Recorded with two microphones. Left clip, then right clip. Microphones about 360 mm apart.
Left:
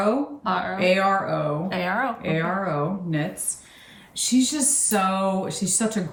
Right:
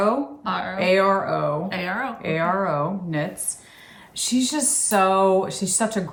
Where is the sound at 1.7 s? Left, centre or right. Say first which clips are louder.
Left 2 dB; centre.